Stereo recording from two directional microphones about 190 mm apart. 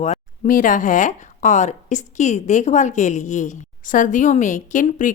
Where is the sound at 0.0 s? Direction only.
40° left (ahead or behind).